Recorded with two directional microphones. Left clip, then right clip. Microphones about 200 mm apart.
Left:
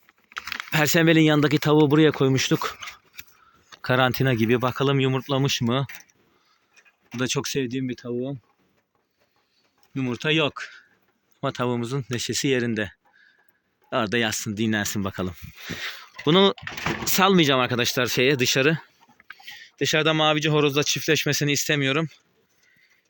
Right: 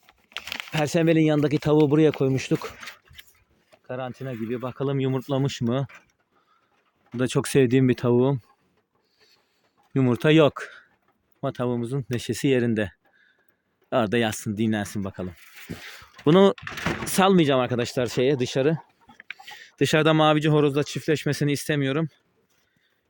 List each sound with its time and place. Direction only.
0.7 s speech: centre (ahead or behind)
3.8 s speech: 35° left (ahead or behind)
4.6 s speech: 5° left (ahead or behind); by 5.9 s 10° right (ahead or behind)
7.2 s speech: 25° right (ahead or behind)
7.4 s speech: 45° right (ahead or behind)
9.9 s speech: 40° right (ahead or behind)
11.3 s speech: 15° right (ahead or behind)
16.0 s a sound: 20° right (ahead or behind)
17.0 s speech: 20° right (ahead or behind); by 18.8 s centre (ahead or behind)
19.1 s speech: 35° right (ahead or behind); by 22.2 s 15° right (ahead or behind)